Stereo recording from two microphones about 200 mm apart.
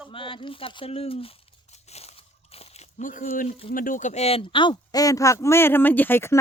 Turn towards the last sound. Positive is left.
turn(degrees=10)  # may be behind; listen again after turning